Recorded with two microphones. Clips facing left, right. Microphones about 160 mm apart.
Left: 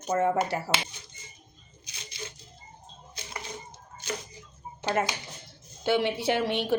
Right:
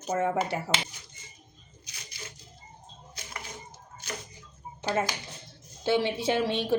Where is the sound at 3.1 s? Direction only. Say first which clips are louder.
Left 2 dB; 25° left (ahead or behind).